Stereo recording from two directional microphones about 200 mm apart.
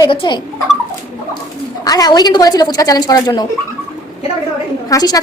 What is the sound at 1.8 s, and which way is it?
A woman's voice, 20° left (ahead or behind).